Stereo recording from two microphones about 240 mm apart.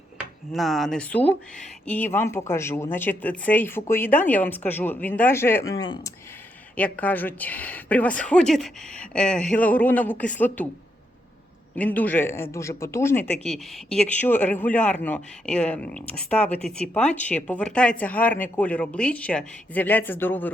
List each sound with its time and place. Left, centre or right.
0.5 s speech: centre
1.2 s speech: left
1.9 s a woman's voice: centre
6.7 s a woman's voice: centre
11.7 s a woman's voice: centre